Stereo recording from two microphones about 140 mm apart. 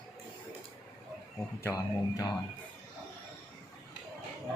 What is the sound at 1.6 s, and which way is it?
Speech, 25° left (ahead or behind).